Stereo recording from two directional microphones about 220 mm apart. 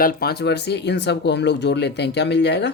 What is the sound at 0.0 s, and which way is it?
Speech, 45° left (ahead or behind).